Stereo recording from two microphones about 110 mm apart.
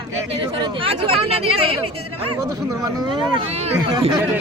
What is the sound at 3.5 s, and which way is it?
Speech, 75° right (ahead or behind).